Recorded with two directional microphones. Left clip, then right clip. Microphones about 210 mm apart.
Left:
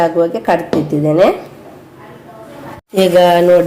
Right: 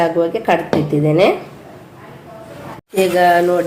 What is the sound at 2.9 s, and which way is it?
Speech, 30° left (ahead or behind).